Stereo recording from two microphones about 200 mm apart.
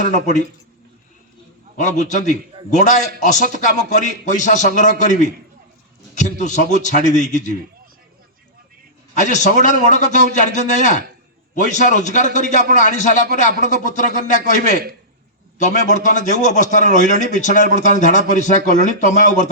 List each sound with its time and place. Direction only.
0.1 s a man's voice: 35° left (ahead or behind)
1.7 s a man's voice: 35° left (ahead or behind)
9.1 s a man's voice: 35° left (ahead or behind)